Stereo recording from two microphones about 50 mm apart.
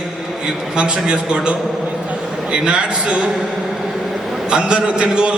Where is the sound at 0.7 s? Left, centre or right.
Right.